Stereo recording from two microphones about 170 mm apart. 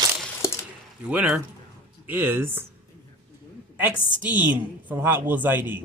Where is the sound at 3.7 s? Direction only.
10° right (ahead or behind).